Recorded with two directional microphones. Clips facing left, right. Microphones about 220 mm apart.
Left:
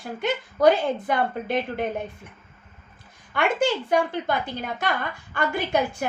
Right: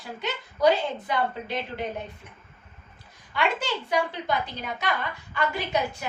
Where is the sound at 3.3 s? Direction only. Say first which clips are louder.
Left 5 dB; 50° left (ahead or behind).